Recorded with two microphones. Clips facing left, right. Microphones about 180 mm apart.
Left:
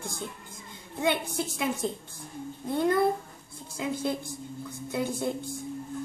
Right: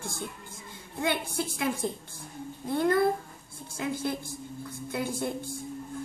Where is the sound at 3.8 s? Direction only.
20° left (ahead or behind).